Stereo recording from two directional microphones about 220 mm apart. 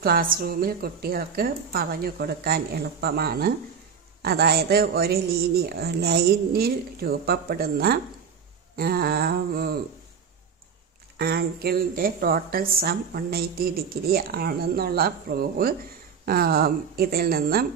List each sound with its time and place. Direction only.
0.0 s speech: 40° right (ahead or behind)
11.1 s speech: 45° right (ahead or behind)